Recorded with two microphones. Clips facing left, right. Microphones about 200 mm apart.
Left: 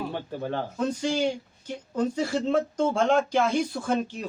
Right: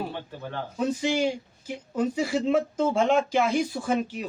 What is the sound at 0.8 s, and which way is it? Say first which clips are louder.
Speech: right 2 dB; 5° right (ahead or behind).